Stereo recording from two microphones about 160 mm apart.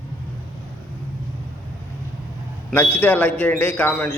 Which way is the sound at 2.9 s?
10° left (ahead or behind).